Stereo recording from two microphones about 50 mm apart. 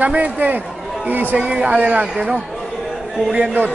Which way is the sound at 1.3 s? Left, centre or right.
Right.